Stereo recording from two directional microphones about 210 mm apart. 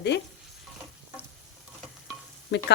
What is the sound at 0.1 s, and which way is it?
Speech, 55° left (ahead or behind).